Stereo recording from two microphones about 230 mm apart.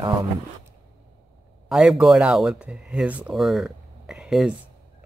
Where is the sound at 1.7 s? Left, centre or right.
Centre.